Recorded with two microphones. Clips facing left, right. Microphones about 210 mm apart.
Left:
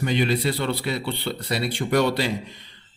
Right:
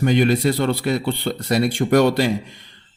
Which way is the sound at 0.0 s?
50° right (ahead or behind).